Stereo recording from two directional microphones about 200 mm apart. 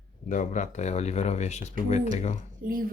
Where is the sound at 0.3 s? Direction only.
40° left (ahead or behind).